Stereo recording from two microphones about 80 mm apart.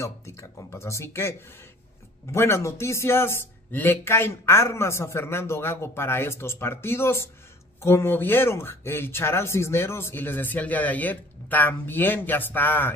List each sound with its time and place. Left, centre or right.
0.0 s a man's voice: left
2.3 s a man's voice: left